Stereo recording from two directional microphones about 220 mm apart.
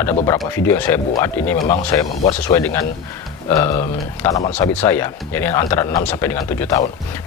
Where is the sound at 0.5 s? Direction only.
10° left (ahead or behind).